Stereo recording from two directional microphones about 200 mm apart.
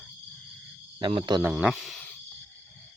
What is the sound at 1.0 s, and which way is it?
Speech, 25° right (ahead or behind).